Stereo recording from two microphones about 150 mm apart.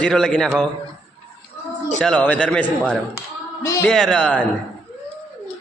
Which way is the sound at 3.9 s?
5° left (ahead or behind).